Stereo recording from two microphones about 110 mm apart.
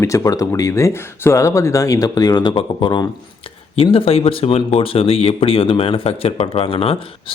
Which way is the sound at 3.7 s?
60° left (ahead or behind).